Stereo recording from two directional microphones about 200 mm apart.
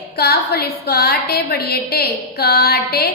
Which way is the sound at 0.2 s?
50° left (ahead or behind).